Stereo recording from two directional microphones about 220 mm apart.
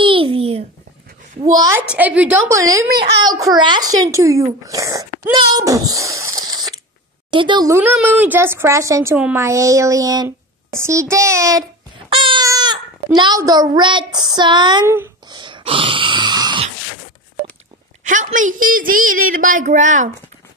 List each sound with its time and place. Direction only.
0.0 s a sound: 25° right (ahead or behind)
1.4 s speech: 15° right (ahead or behind)
2.9 s speech: 45° right (ahead or behind)
3.3 s a child's voice: 15° right (ahead or behind)
18.0 s a woman's voice: 35° right (ahead or behind)